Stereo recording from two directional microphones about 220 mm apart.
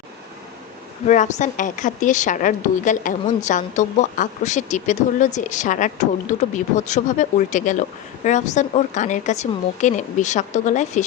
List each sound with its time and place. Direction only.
1.0 s a woman's voice: 35° left (ahead or behind)